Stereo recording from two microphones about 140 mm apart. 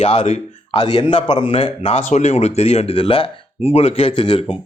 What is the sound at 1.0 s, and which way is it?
Speech, 35° left (ahead or behind).